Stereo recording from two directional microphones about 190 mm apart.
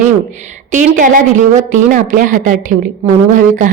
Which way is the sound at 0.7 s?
40° right (ahead or behind).